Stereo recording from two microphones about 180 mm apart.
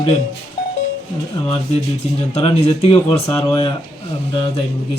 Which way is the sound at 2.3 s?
35° left (ahead or behind).